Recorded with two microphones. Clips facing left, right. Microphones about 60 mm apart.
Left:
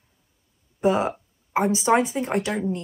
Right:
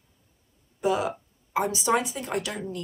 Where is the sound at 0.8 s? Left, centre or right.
Left.